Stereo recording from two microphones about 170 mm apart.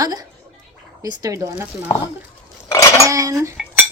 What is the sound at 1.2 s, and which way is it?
Speech, 20° right (ahead or behind).